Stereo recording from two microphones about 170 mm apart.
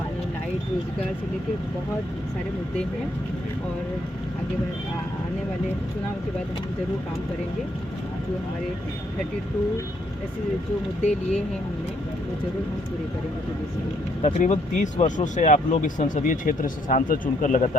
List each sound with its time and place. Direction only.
11.0 s speech: 40° left (ahead or behind)
14.2 s speech: 45° left (ahead or behind)